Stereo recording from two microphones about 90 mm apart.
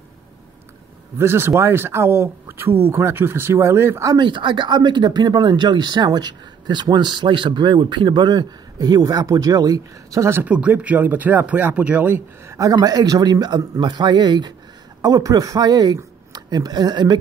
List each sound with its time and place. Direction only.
1.1 s speech: 25° right (ahead or behind)
4.2 s speech: 65° right (ahead or behind); by 10.4 s 35° right (ahead or behind)
10.4 s speech: 15° right (ahead or behind)
12.5 s a man's voice: 40° right (ahead or behind)